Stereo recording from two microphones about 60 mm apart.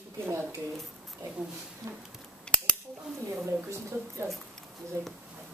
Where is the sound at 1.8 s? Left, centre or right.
Right.